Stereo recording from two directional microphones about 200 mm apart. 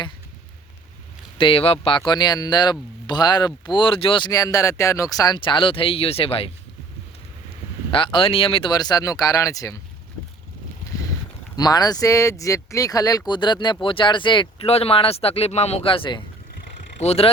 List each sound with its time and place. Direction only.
1.4 s speech: 25° left (ahead or behind)
7.9 s speech: 25° left (ahead or behind)
11.5 s speech: 20° left (ahead or behind)